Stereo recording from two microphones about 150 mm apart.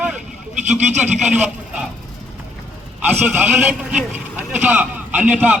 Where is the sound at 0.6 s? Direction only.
50° right (ahead or behind).